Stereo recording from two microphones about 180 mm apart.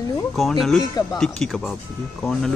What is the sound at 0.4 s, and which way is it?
Speech, centre (ahead or behind).